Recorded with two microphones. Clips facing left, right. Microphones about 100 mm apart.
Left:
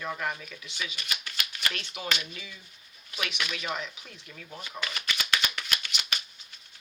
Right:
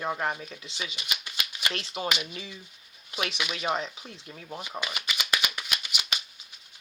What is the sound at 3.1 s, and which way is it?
Speech, 30° right (ahead or behind).